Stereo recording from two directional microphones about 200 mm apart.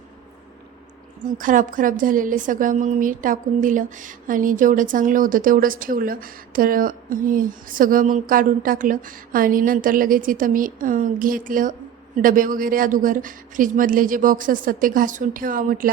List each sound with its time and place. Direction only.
1.2 s a woman's voice: 40° right (ahead or behind)